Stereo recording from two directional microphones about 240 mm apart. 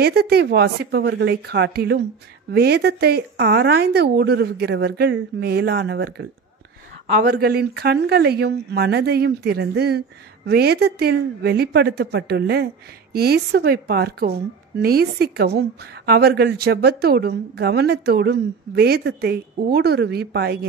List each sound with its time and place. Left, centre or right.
0.0 s a woman's voice: right